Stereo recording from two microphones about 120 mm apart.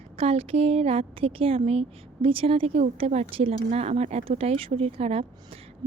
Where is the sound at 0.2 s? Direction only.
55° right (ahead or behind).